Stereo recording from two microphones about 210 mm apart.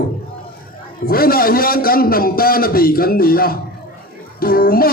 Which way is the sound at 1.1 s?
45° left (ahead or behind).